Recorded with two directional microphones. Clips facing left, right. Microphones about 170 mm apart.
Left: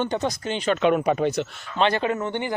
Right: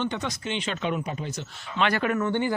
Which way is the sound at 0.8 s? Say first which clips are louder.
Left 10 dB; 65° left (ahead or behind).